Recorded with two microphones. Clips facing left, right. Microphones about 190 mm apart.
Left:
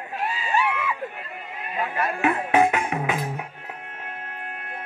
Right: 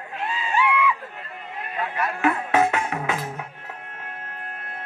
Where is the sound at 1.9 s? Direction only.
25° left (ahead or behind).